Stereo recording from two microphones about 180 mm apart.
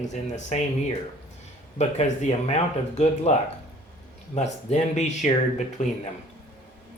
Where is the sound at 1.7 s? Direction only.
40° left (ahead or behind).